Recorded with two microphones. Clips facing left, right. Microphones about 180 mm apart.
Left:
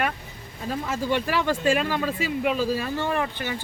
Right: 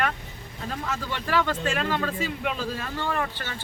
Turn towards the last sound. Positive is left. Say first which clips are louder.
# left 3 dB
turn(degrees=15)  # may be behind; listen again after turning